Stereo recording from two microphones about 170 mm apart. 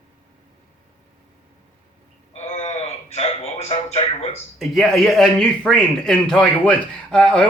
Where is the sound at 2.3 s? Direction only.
35° left (ahead or behind).